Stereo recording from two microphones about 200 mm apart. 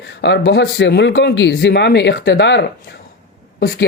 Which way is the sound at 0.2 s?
60° left (ahead or behind).